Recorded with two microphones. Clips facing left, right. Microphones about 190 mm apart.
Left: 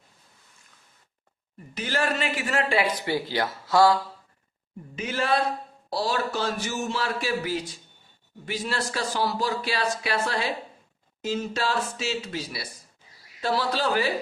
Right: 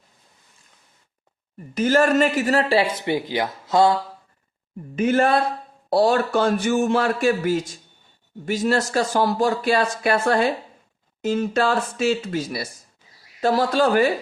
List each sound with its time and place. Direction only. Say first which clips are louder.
1.7 s speech: right 10 dB; 45° right (ahead or behind)
2.9 s speech: right 4 dB; 20° right (ahead or behind)
4.9 s speech: right 7 dB; 50° right (ahead or behind)